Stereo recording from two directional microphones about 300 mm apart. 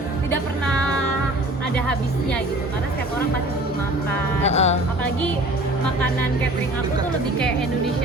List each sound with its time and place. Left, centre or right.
1.7 s music: centre
4.4 s music: left